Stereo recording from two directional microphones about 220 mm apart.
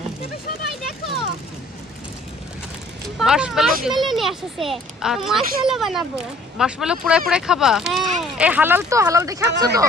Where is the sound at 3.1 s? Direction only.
5° right (ahead or behind).